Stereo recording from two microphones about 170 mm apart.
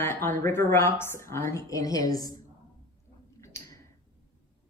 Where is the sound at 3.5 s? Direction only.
15° left (ahead or behind).